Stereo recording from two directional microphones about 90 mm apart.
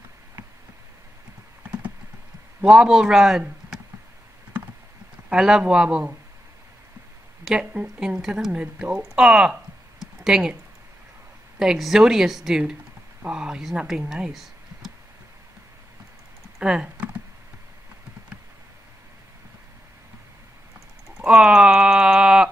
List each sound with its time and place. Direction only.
1.6 s clip-clop: 15° right (ahead or behind)
2.6 s speech: 10° right (ahead or behind)
5.3 s speech: 10° right (ahead or behind)
7.4 s speech: 10° right (ahead or behind)
11.5 s speech: 5° right (ahead or behind)
16.5 s typing: 10° right (ahead or behind)
21.2 s speech: 5° right (ahead or behind)